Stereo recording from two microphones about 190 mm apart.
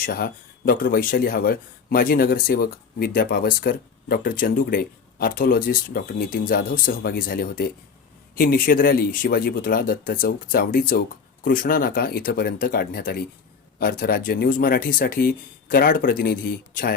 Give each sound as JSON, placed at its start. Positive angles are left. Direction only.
{"t": 0.0, "sound": "speech", "side_deg": 50}